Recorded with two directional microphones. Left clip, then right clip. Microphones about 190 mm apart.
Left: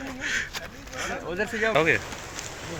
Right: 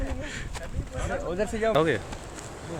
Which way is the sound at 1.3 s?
70° right (ahead or behind).